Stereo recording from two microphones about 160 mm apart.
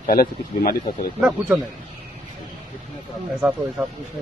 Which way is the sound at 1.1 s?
10° right (ahead or behind).